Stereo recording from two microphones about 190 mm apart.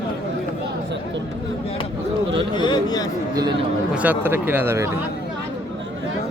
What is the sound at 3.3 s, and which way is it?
Speech, 20° right (ahead or behind).